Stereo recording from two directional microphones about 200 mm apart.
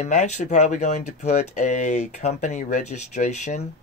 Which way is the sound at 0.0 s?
35° left (ahead or behind).